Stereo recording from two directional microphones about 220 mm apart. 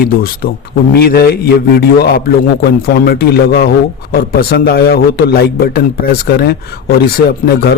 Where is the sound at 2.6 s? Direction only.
45° left (ahead or behind).